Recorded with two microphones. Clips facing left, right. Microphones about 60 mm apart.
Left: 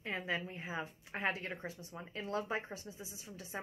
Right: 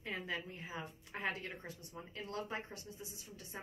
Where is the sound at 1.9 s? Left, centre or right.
Left.